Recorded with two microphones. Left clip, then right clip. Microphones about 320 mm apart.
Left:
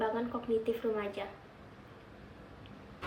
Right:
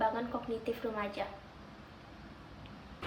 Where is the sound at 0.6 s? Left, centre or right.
Centre.